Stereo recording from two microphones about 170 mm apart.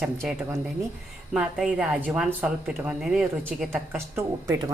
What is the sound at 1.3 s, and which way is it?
Speech, 5° right (ahead or behind).